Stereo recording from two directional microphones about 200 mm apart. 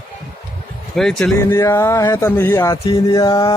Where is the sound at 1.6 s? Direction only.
15° left (ahead or behind).